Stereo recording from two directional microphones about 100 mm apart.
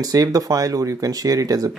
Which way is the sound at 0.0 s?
40° right (ahead or behind).